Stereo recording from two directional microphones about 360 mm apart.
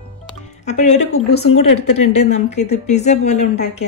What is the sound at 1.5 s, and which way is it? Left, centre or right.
Speech, left.